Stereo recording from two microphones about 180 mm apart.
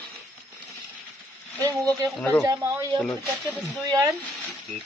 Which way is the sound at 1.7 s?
Centre (ahead or behind).